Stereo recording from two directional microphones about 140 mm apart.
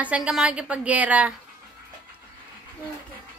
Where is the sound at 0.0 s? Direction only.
10° right (ahead or behind).